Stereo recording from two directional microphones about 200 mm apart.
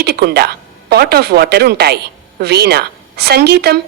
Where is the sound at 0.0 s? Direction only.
55° right (ahead or behind).